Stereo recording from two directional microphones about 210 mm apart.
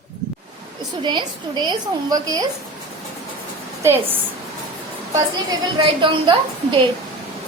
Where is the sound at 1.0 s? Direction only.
20° right (ahead or behind).